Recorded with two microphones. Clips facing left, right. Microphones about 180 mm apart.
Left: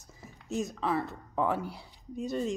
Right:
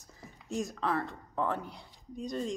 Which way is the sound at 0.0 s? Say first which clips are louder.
Left 1 dB; 5° left (ahead or behind).